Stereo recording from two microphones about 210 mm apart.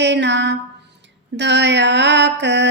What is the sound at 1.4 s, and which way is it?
Mantra, 55° right (ahead or behind).